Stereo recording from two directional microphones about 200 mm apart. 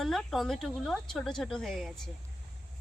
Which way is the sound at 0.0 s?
Centre (ahead or behind).